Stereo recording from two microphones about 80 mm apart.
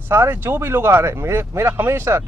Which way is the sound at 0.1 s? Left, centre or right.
Right.